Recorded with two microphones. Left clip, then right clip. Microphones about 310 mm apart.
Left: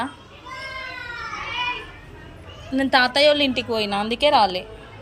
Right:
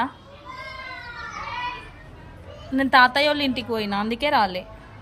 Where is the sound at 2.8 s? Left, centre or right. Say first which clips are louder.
Even; centre.